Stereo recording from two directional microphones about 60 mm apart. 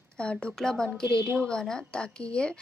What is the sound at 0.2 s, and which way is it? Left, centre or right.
A woman's voice, centre.